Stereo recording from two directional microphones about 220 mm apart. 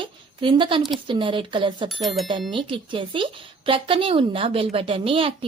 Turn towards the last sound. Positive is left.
turn(degrees=-25)  # may be behind; listen again after turning